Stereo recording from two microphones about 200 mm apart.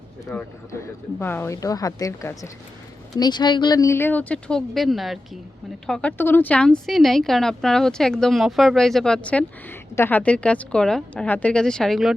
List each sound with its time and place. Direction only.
0.3 s a woman's voice: 10° left (ahead or behind)